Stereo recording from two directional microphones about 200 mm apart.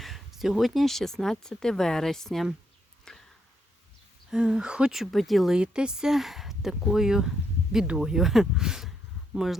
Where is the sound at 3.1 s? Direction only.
5° left (ahead or behind).